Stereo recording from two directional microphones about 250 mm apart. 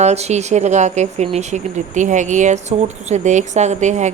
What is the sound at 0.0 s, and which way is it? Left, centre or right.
Speech, right.